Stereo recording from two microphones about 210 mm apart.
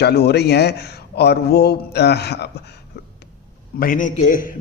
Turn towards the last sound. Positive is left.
turn(degrees=40)  # may be behind; listen again after turning